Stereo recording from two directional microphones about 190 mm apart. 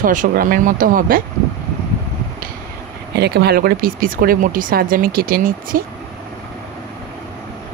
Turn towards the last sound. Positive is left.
turn(degrees=-50)  # may be behind; listen again after turning